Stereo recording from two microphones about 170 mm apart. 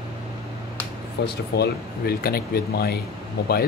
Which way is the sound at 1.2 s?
70° left (ahead or behind).